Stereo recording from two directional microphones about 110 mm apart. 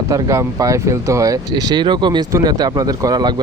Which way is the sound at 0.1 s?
30° right (ahead or behind).